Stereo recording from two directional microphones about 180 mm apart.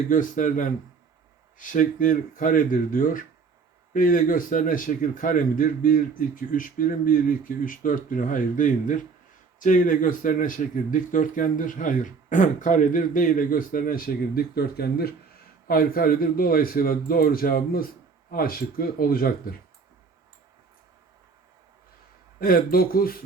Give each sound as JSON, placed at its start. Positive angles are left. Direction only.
{"t": 0.1, "sound": "a man's voice", "side_deg": 45}
{"t": 22.4, "sound": "a man's voice", "side_deg": 55}